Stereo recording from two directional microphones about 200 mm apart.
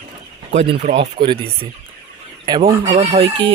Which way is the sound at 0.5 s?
30° right (ahead or behind).